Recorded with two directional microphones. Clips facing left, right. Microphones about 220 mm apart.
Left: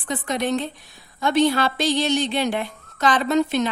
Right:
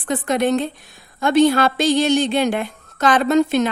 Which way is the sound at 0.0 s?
55° right (ahead or behind).